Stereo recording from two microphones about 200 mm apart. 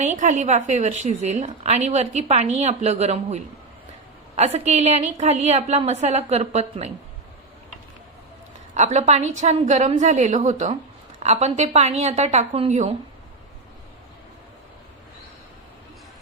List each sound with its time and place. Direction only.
0.0 s a woman's voice: 35° right (ahead or behind)
8.7 s a woman's voice: 35° right (ahead or behind)